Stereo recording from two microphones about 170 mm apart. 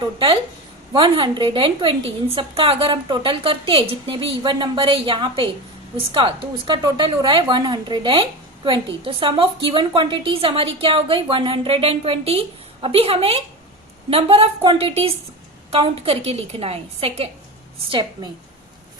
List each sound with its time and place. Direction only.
0.0 s a woman's voice: 30° right (ahead or behind)